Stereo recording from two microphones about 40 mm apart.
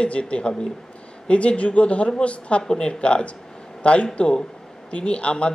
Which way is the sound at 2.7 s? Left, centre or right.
Centre.